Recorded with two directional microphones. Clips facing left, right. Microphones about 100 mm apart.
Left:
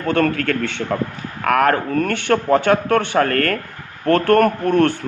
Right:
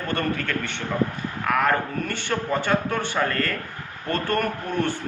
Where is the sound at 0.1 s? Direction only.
90° left.